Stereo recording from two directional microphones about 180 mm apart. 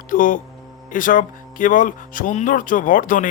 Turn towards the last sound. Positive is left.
turn(degrees=50)  # may be behind; listen again after turning